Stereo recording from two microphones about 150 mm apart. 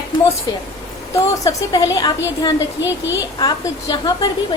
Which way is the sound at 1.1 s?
20° left (ahead or behind).